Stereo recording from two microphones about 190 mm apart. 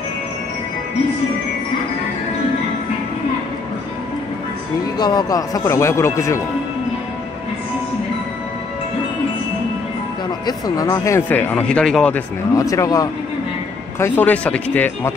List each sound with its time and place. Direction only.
4.9 s speech: 20° left (ahead or behind)
10.4 s speech: 15° left (ahead or behind)
12.5 s speech: 15° left (ahead or behind)